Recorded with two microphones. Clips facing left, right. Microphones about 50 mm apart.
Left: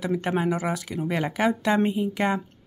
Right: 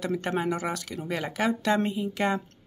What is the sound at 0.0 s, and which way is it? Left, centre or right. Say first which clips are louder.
Speech: left 3 dB; centre.